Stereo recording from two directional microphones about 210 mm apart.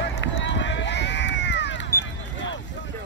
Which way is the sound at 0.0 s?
60° left (ahead or behind).